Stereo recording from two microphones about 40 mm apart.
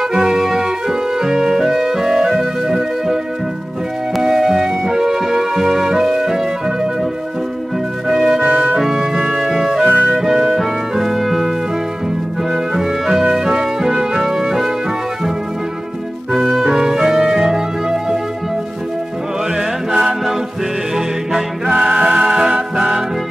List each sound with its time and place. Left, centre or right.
0.1 s music: centre
4.2 s music: centre
8.1 s music: centre
8.4 s music: right
8.7 s music: centre
9.8 s music: right
10.1 s music: centre
12.5 s music: centre
16.6 s music: centre
19.9 s music: centre
21.7 s music: right